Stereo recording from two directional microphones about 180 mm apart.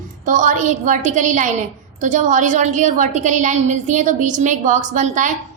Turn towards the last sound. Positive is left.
turn(degrees=-45)  # may be behind; listen again after turning